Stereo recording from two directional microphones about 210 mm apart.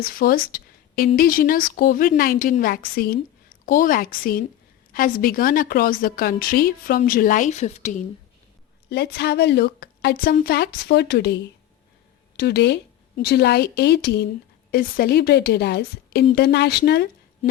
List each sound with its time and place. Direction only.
0.0 s a woman's voice: 45° left (ahead or behind)
8.9 s a woman's voice: 50° left (ahead or behind)
12.4 s a woman's voice: 50° left (ahead or behind)